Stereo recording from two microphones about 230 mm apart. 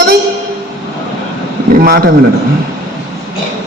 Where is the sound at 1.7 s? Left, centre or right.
Right.